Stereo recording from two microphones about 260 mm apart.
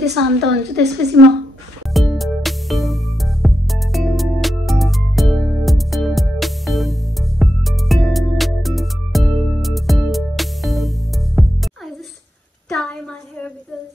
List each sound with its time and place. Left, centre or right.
0.0 s a woman's voice: right
2.0 s music: centre
12.6 s a sound: centre